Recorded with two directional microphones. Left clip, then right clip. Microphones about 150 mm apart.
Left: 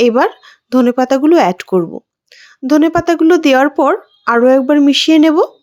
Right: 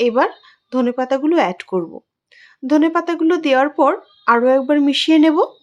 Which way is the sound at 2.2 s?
30° left (ahead or behind).